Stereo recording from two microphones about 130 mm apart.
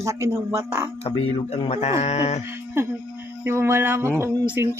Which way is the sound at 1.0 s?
45° left (ahead or behind).